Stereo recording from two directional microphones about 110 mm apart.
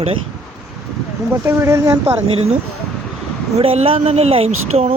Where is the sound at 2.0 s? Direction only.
70° right (ahead or behind).